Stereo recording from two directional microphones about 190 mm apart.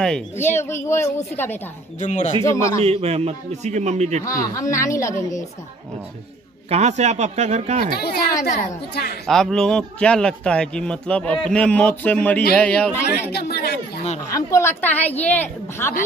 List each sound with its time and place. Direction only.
0.0 s a woman's voice: 10° left (ahead or behind)
2.0 s speech: 40° left (ahead or behind)
2.4 s a woman's voice: 15° left (ahead or behind)
2.8 s a man's voice: 30° right (ahead or behind)
4.2 s a woman's voice: 15° left (ahead or behind)
6.7 s a man's voice: 35° right (ahead or behind)
9.2 s a man's voice: 5° left (ahead or behind)
13.3 s speech: 55° left (ahead or behind)
14.3 s a woman's voice: 15° left (ahead or behind)